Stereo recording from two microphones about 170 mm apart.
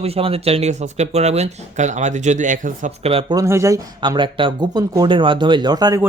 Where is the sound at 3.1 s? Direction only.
35° right (ahead or behind).